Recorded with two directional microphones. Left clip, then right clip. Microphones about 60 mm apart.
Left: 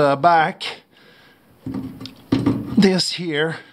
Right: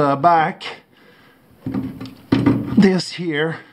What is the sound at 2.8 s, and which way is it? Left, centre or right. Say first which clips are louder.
Speech: left 2 dB; left.